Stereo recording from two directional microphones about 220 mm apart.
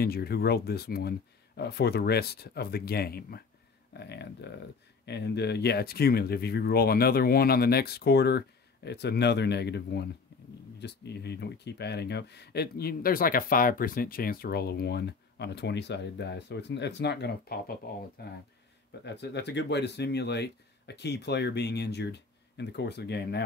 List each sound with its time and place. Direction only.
0.0 s speech: 45° left (ahead or behind)